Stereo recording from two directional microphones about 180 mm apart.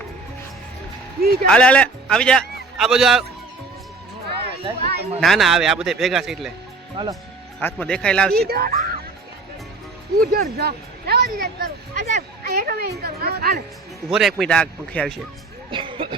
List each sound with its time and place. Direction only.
1.2 s speech: 60° right (ahead or behind)
1.5 s a man's voice: 5° left (ahead or behind)
4.7 s speech: 25° right (ahead or behind)
5.2 s speech: centre (ahead or behind)
6.9 s speech: 25° right (ahead or behind)
7.6 s speech: 5° left (ahead or behind)
8.4 s speech: 60° right (ahead or behind)
10.2 s speech: 60° right (ahead or behind)
12.0 s a woman's voice: 40° right (ahead or behind)
12.5 s speech: 55° right (ahead or behind)
14.1 s speech: centre (ahead or behind)
15.7 s speech: 30° right (ahead or behind)